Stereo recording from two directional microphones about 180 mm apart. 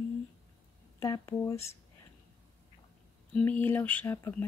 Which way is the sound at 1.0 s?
15° left (ahead or behind).